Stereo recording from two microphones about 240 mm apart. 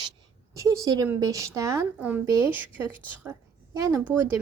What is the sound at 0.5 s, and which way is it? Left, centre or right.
A woman's voice, centre.